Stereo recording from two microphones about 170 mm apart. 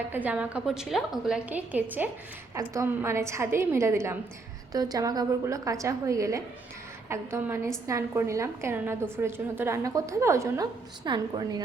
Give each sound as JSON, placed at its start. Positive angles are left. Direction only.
{"t": 0.1, "sound": "a woman's voice", "side_deg": -10}